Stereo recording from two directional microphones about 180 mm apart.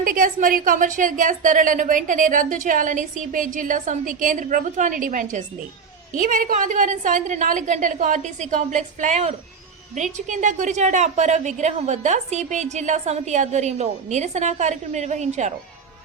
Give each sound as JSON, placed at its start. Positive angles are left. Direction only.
{"t": 0.0, "sound": "a woman's voice", "side_deg": -50}